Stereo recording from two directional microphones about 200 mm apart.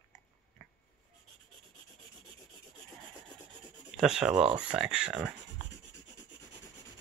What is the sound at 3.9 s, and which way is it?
Speech, centre (ahead or behind).